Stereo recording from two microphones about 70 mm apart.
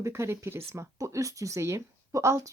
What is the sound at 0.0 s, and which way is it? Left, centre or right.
A woman's voice, right.